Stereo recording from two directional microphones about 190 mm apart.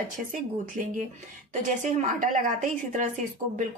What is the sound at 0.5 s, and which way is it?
Speech, 45° right (ahead or behind).